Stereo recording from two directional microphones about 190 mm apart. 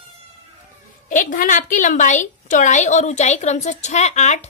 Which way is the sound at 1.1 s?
45° left (ahead or behind).